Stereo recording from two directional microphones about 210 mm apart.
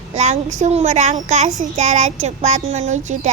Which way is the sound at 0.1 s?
35° right (ahead or behind).